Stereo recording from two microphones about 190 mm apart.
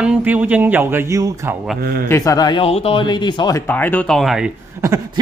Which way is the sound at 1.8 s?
55° right (ahead or behind).